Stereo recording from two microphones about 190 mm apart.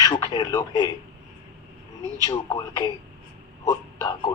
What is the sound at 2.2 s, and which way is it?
A man's voice, 20° left (ahead or behind).